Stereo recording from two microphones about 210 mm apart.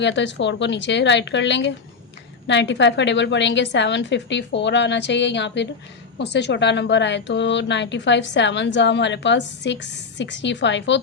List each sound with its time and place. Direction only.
0.0 s a woman's voice: 60° left (ahead or behind)